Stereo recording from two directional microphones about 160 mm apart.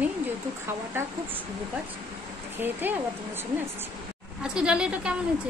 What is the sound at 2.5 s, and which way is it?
Speech, 10° right (ahead or behind).